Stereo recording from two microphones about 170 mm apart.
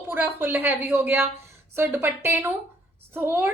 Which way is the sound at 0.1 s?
10° right (ahead or behind).